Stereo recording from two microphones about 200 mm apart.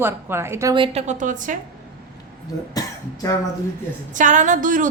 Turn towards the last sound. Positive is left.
turn(degrees=-40)  # may be behind; listen again after turning